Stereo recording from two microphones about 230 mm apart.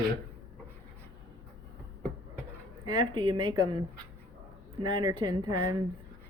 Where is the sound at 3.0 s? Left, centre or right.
Right.